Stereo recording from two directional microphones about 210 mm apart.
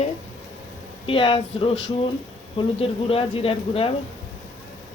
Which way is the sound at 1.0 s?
25° left (ahead or behind).